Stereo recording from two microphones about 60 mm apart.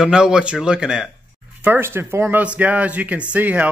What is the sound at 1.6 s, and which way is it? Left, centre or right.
Speech, right.